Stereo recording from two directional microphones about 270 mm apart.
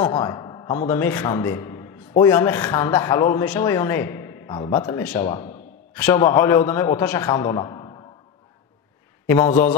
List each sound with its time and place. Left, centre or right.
0.0 s a man's voice: centre